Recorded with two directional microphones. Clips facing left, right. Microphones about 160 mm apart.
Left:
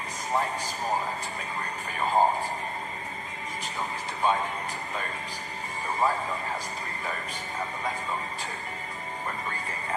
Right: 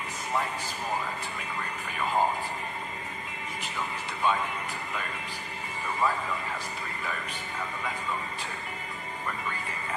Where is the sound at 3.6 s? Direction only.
40° left (ahead or behind).